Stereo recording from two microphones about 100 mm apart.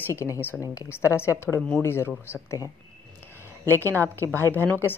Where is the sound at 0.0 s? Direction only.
30° left (ahead or behind).